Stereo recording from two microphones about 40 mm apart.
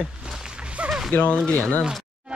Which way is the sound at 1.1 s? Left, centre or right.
Left.